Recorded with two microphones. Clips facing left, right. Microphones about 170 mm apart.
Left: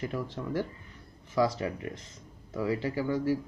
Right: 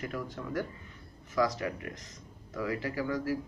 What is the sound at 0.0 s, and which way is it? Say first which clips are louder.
Speech: left 3 dB; 30° left (ahead or behind).